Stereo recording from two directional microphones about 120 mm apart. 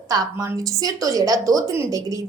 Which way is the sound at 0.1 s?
30° right (ahead or behind).